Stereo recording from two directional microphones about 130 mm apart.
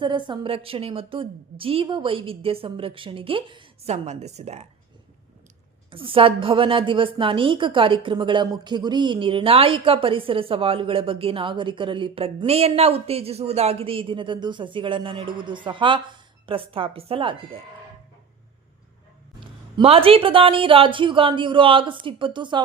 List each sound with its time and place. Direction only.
0.0 s a woman's voice: 40° right (ahead or behind)
3.8 s a woman's voice: 55° right (ahead or behind)
5.9 s a woman's voice: 45° right (ahead or behind)
19.4 s speech: 45° right (ahead or behind)